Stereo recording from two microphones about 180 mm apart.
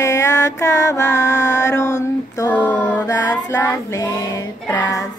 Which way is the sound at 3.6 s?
10° left (ahead or behind).